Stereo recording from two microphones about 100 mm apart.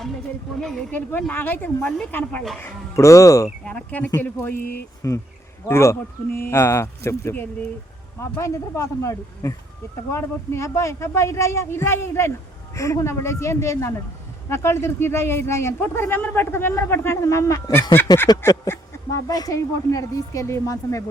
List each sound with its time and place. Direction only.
0.6 s speech: 5° left (ahead or behind)
0.9 s speech: 15° left (ahead or behind)
2.6 s speech: 30° left (ahead or behind)
3.6 s speech: 15° left (ahead or behind)
5.0 s speech: 35° left (ahead or behind)